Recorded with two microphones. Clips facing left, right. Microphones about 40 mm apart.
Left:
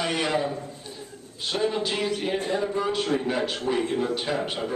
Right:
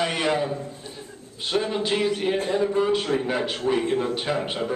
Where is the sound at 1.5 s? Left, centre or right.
Centre.